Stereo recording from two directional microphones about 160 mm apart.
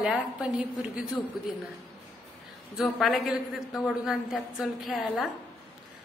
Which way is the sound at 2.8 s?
Centre (ahead or behind).